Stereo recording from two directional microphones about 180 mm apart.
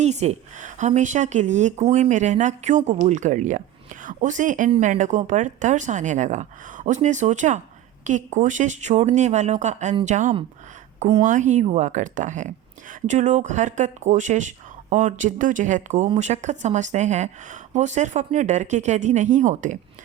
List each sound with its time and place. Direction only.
0.0 s a woman's voice: 40° right (ahead or behind)